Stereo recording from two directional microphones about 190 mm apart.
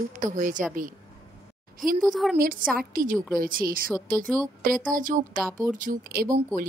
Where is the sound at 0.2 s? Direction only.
40° right (ahead or behind).